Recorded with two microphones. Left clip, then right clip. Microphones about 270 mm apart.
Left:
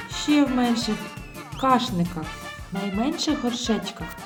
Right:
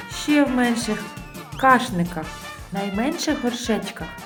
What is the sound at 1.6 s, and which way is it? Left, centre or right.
Speech, left.